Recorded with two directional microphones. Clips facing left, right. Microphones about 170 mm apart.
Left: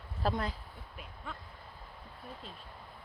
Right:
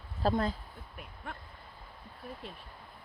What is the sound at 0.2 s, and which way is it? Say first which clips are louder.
Speech: right 4 dB; 30° right (ahead or behind).